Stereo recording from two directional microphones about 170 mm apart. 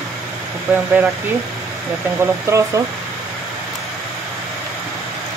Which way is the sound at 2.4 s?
15° right (ahead or behind).